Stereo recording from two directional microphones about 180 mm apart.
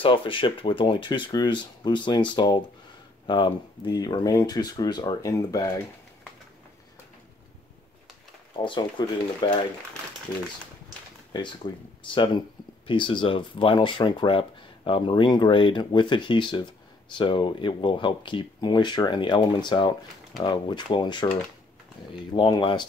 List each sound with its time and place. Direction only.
0.0 s speech: 30° left (ahead or behind)
8.6 s speech: 25° left (ahead or behind)
11.3 s speech: 25° left (ahead or behind)
22.3 s speech: 25° left (ahead or behind)